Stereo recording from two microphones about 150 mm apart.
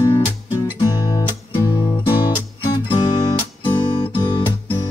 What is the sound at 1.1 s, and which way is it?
Music, 25° left (ahead or behind).